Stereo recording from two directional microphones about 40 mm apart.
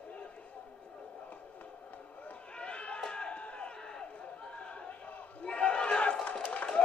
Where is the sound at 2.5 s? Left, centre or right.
Left.